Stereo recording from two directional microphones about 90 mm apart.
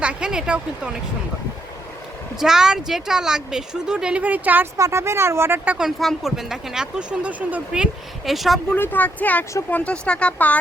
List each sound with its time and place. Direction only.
0.0 s a sound: 10° right (ahead or behind)
2.4 s a woman's voice: 5° right (ahead or behind)
4.8 s speech: 30° right (ahead or behind)
5.7 s speech: centre (ahead or behind)
8.7 s speech: 20° left (ahead or behind)